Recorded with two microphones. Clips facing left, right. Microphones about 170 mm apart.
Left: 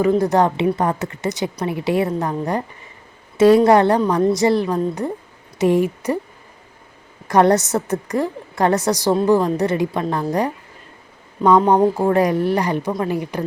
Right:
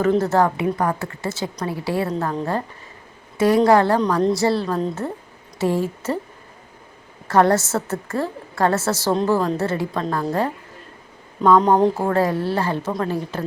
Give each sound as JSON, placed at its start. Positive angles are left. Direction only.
{"t": 0.0, "sound": "a woman's voice", "side_deg": 15}
{"t": 7.3, "sound": "a woman's voice", "side_deg": 20}
{"t": 11.9, "sound": "a woman's voice", "side_deg": 15}